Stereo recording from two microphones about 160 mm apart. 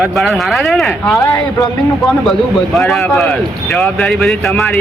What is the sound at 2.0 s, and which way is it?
A man's voice, centre (ahead or behind).